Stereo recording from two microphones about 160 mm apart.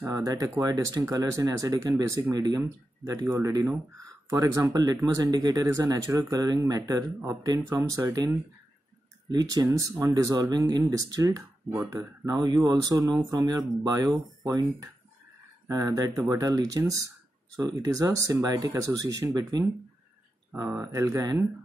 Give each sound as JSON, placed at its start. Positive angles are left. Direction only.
{"t": 0.1, "sound": "speech", "side_deg": -20}